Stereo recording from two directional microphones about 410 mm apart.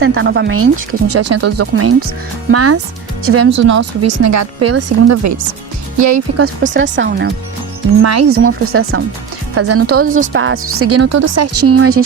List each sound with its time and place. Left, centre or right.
0.0 s speech: right
6.6 s speech: right
8.0 s speech: right
10.1 s speech: right